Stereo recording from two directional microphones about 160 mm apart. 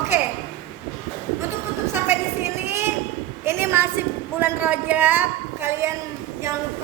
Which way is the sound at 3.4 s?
15° right (ahead or behind).